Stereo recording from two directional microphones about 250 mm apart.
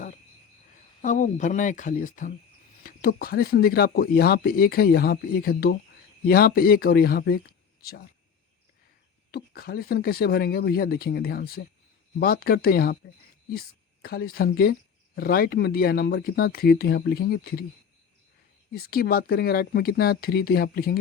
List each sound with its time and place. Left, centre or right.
1.0 s a woman's voice: left
9.3 s a woman's voice: left
18.7 s a woman's voice: left